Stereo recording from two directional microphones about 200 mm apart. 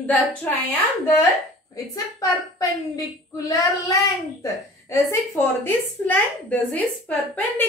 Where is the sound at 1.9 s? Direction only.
20° left (ahead or behind).